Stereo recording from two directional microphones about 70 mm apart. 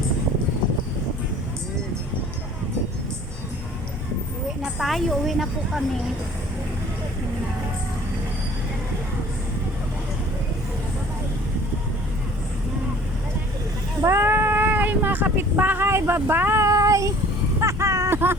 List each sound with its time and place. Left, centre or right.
4.8 s a woman's voice: centre
14.0 s a sound: right
15.9 s speech: right
16.6 s child singing: right
17.6 s vehicle: right